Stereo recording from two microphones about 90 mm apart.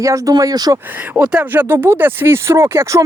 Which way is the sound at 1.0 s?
15° right (ahead or behind).